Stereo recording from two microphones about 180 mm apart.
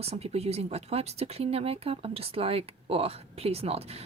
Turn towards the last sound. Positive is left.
turn(degrees=-35)  # may be behind; listen again after turning